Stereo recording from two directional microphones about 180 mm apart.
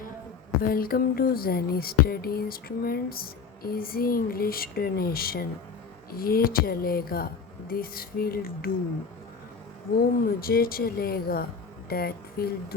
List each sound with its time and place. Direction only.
0.6 s speech: 55° left (ahead or behind)
10.0 s speech: 55° left (ahead or behind)